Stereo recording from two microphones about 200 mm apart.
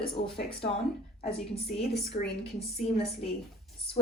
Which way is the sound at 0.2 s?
60° left (ahead or behind).